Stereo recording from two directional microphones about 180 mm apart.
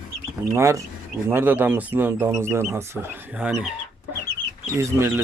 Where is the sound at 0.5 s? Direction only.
15° right (ahead or behind).